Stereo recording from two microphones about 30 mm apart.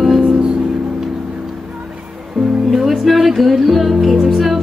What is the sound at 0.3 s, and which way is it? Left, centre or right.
Music, right.